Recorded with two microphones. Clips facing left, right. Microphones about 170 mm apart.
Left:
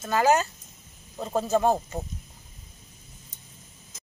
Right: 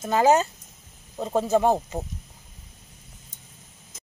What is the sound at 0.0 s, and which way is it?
Speech, 20° right (ahead or behind).